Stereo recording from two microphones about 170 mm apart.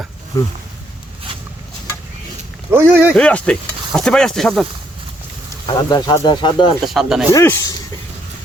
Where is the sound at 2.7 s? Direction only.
15° right (ahead or behind).